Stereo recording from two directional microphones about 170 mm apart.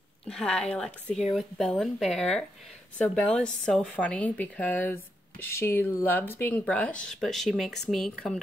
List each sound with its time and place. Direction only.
0.3 s a woman's voice: 5° left (ahead or behind)